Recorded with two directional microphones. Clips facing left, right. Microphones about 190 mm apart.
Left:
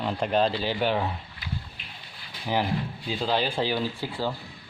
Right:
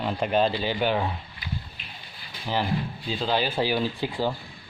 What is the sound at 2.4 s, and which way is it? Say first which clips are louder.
Speech: even; 15° left (ahead or behind).